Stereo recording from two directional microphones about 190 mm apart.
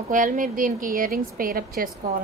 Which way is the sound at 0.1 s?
45° right (ahead or behind).